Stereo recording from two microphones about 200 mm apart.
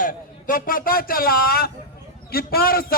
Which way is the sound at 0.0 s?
45° left (ahead or behind).